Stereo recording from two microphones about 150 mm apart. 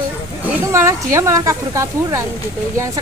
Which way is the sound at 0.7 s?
20° right (ahead or behind).